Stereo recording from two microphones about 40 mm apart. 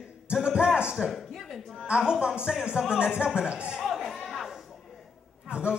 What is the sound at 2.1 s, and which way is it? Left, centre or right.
A man's voice, centre.